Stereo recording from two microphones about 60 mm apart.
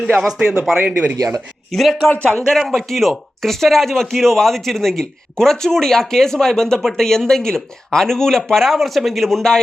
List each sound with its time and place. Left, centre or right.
0.0 s speech: centre
0.3 s speech: centre
1.7 s speech: centre